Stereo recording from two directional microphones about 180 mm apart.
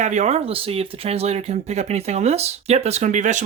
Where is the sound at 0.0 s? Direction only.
40° right (ahead or behind).